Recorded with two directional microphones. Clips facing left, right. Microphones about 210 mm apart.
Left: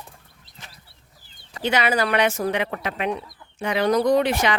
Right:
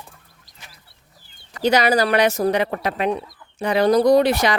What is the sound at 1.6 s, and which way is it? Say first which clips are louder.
Speech: right 5 dB; 40° right (ahead or behind).